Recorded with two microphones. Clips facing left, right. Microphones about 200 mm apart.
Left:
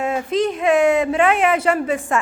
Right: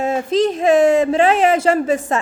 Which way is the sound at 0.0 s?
25° right (ahead or behind).